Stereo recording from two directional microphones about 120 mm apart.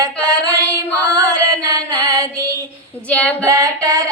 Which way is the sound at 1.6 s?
30° right (ahead or behind).